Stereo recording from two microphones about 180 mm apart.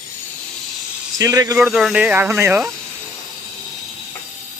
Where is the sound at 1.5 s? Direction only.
5° right (ahead or behind).